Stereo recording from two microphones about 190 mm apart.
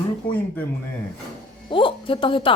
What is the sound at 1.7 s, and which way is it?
Speech, 25° left (ahead or behind).